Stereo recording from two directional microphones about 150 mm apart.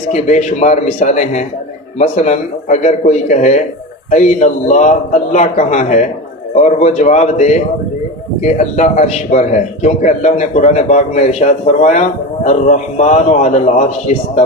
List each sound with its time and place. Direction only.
0.1 s a man's voice: 50° left (ahead or behind)